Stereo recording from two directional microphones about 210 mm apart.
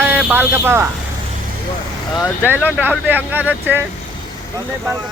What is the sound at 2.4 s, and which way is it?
Speech, 10° right (ahead or behind).